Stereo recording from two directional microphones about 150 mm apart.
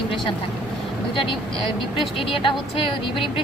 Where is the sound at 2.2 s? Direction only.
35° left (ahead or behind).